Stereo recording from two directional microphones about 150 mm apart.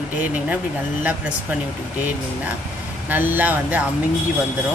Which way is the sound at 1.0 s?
10° right (ahead or behind).